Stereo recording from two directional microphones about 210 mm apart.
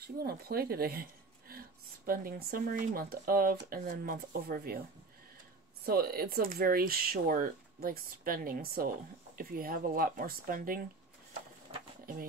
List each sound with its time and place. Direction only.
0.0 s speech: 45° right (ahead or behind)
2.0 s speech: 45° right (ahead or behind)
5.9 s speech: 45° right (ahead or behind)
11.7 s sewing machine: 30° right (ahead or behind)